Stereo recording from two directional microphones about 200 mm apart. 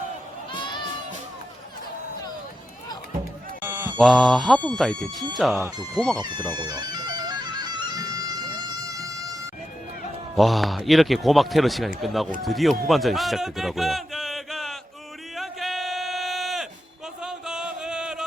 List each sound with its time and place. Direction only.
0.5 s crowd: 25° left (ahead or behind)
3.6 s a sound: 10° right (ahead or behind)
3.9 s a man's voice: centre (ahead or behind)
5.5 s speech: 15° right (ahead or behind)
6.0 s a man's voice: centre (ahead or behind)
6.6 s bagpipes: 20° right (ahead or behind)
10.3 s a man's voice: centre (ahead or behind)
12.9 s a sound: centre (ahead or behind)
17.2 s music: 5° right (ahead or behind)